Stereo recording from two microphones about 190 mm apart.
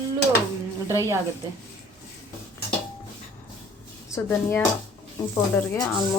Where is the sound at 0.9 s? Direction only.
15° right (ahead or behind).